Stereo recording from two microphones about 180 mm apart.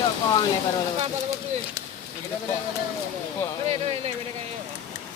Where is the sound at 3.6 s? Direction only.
35° right (ahead or behind).